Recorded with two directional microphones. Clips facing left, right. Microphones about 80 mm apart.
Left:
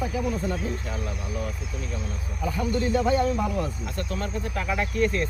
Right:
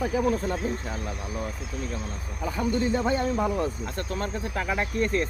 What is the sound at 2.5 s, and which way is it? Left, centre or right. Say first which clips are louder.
Speech: even; right.